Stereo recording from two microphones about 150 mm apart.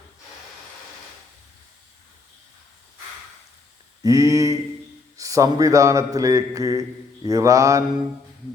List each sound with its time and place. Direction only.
4.0 s a man's voice: 25° right (ahead or behind)